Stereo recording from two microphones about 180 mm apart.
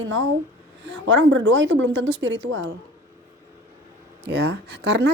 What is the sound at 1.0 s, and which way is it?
Speech, 85° right.